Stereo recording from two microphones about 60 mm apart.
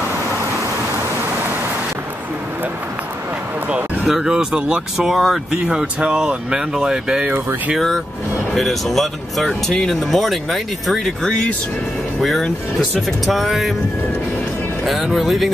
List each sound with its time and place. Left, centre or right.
4.1 s speech: centre
5.0 s speech: centre
8.5 s speech: centre
11.2 s speech: centre
12.2 s speech: centre
14.9 s speech: centre